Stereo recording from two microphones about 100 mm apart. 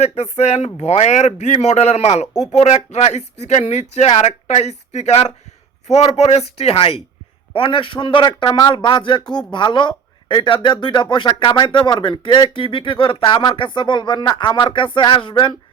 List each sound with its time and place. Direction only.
0.0 s speech: 90° left; by 15.5 s 55° left (ahead or behind)